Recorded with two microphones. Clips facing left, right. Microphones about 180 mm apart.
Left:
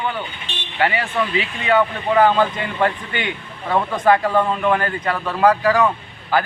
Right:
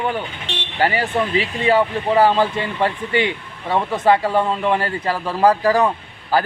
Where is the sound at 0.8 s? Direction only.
35° right (ahead or behind).